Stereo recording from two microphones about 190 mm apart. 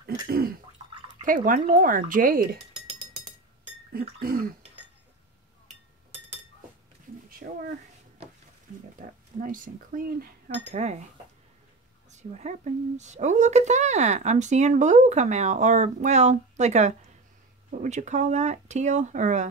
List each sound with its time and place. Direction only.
0.3 s speech: 50° right (ahead or behind)
3.9 s speech: 50° right (ahead or behind)
7.4 s speech: 55° right (ahead or behind)
9.0 s speech: 45° right (ahead or behind)
10.7 s speech: 35° right (ahead or behind)
12.1 s speech: 40° right (ahead or behind)